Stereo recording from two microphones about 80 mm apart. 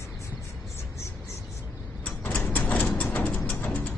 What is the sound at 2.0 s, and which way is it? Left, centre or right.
Door, centre.